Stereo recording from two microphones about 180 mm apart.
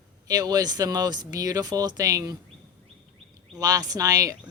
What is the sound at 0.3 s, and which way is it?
Speech, 20° right (ahead or behind).